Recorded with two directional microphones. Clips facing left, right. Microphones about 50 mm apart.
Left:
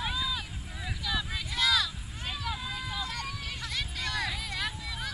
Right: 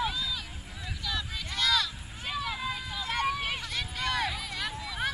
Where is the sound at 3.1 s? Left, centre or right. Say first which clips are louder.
Right 8 dB; right.